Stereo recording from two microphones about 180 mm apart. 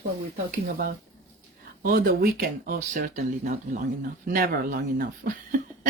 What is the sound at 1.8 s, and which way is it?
Speech, 55° right (ahead or behind).